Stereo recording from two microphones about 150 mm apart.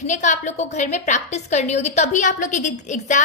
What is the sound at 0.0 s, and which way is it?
A woman's voice, 55° left (ahead or behind).